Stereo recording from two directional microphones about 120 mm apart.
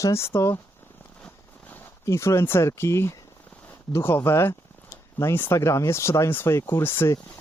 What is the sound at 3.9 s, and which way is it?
Speech, 20° left (ahead or behind).